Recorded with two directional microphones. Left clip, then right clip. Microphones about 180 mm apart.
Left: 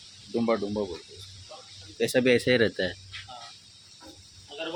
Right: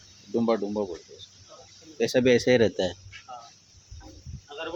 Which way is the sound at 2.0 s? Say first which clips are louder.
Right 1 dB; 15° right (ahead or behind).